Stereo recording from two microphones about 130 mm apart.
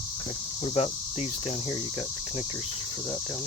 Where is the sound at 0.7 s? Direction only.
50° left (ahead or behind).